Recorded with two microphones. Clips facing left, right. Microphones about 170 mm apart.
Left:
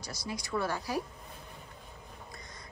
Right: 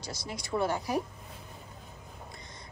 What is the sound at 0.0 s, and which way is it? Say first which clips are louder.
Speech: even; 25° right (ahead or behind).